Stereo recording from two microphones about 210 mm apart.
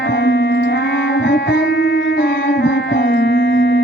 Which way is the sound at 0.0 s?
55° left (ahead or behind).